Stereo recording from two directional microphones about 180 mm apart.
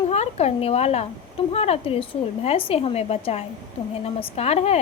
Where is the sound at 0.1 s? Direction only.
35° left (ahead or behind).